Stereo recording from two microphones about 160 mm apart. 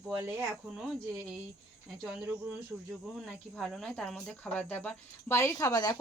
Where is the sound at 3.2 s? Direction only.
Centre (ahead or behind).